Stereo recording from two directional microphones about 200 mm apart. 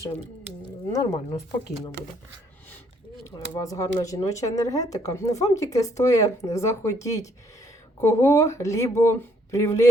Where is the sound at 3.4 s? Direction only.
15° left (ahead or behind).